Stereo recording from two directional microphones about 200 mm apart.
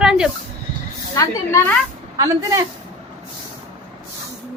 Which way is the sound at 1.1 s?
15° left (ahead or behind).